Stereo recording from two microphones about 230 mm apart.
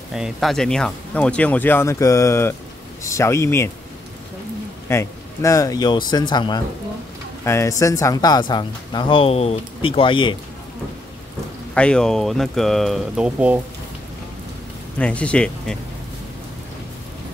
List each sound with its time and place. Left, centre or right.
0.1 s speech: centre
4.8 s speech: centre
11.7 s speech: centre
15.0 s speech: centre